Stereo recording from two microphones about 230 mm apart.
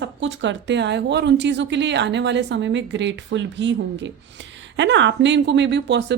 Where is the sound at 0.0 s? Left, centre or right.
Right.